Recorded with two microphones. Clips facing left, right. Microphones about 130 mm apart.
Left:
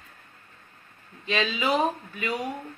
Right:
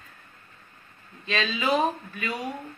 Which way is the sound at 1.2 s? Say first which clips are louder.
Left 1 dB; 15° left (ahead or behind).